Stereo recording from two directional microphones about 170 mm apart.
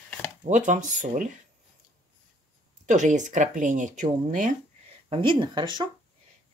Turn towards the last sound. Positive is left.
turn(degrees=-25)  # may be behind; listen again after turning